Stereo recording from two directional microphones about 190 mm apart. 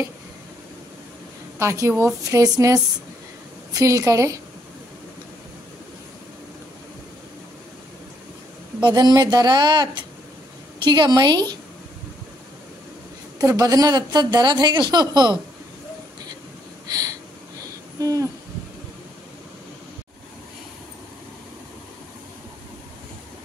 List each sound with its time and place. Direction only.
1.6 s a woman's voice: 15° right (ahead or behind)
8.8 s a woman's voice: 20° right (ahead or behind)
13.4 s a woman's voice: 20° right (ahead or behind)
17.9 s hoot: 15° right (ahead or behind)